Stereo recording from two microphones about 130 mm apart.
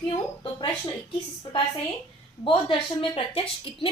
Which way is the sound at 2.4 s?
40° left (ahead or behind).